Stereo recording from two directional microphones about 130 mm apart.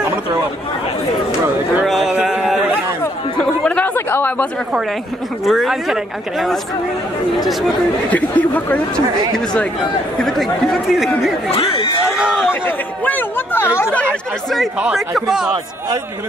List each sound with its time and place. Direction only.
1.9 s a sound: centre (ahead or behind)
3.3 s chatter: 10° left (ahead or behind)
5.4 s speech: centre (ahead or behind)
8.1 s speech: 10° left (ahead or behind)
10.2 s speech: centre (ahead or behind)
11.5 s speech: 45° left (ahead or behind)
12.2 s speech: 5° right (ahead or behind)
12.4 s speech: 15° left (ahead or behind)
14.8 s speech: 5° right (ahead or behind)